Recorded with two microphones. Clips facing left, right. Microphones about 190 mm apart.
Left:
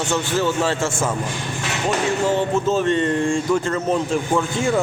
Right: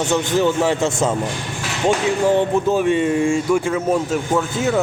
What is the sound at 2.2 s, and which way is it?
Speech, 15° right (ahead or behind).